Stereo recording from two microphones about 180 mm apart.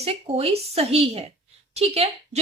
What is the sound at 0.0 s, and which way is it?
A woman's voice, 35° right (ahead or behind).